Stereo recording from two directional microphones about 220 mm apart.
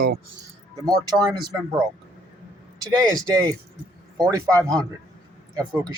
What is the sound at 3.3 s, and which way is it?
Speech, 15° right (ahead or behind).